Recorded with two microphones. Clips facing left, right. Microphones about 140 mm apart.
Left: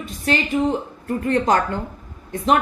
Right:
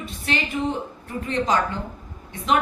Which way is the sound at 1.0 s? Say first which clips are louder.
Left 6 dB; 50° left (ahead or behind).